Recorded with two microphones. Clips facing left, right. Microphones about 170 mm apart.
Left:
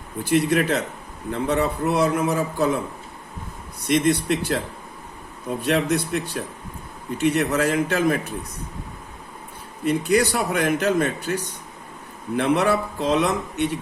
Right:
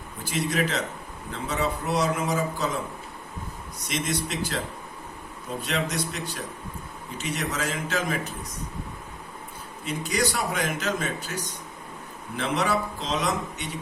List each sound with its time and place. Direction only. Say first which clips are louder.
0.3 s speech: left 7 dB; 60° left (ahead or behind)
3.8 s speech: left 10 dB; 60° left (ahead or behind)
5.6 s speech: left 8 dB; 60° left (ahead or behind)
9.8 s speech: left 8 dB; 60° left (ahead or behind)